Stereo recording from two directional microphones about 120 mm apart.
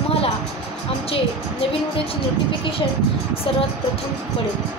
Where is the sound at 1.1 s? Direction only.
50° left (ahead or behind).